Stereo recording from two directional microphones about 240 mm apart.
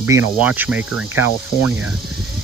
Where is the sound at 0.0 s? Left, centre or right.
Centre.